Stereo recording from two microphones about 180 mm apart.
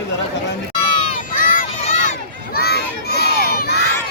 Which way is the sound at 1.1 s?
50° left (ahead or behind).